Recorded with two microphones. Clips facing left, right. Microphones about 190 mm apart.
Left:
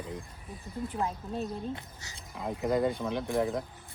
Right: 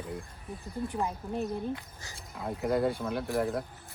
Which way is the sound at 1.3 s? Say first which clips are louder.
Right 2 dB; 15° right (ahead or behind).